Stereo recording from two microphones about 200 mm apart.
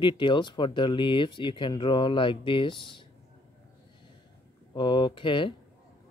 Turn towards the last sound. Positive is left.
turn(degrees=25)  # may be behind; listen again after turning